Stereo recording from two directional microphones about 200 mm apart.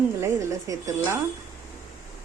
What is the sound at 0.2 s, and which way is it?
Speech, 15° right (ahead or behind).